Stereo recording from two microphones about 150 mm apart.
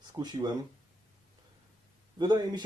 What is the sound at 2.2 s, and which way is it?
Speech, 30° right (ahead or behind).